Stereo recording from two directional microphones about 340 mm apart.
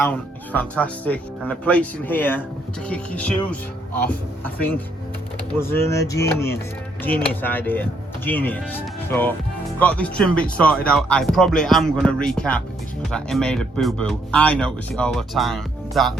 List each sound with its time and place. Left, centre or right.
0.0 s speech: centre